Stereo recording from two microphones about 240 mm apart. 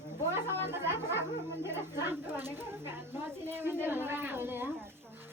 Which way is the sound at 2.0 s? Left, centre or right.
Centre.